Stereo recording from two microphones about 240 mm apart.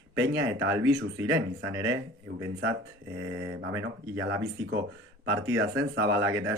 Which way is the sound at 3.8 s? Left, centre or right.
Right.